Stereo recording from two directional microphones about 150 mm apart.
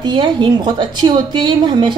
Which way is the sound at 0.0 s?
30° right (ahead or behind).